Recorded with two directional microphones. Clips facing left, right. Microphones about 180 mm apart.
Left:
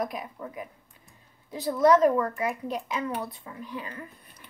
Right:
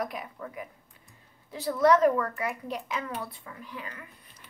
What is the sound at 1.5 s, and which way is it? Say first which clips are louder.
A woman's voice: left 2 dB; 15° left (ahead or behind).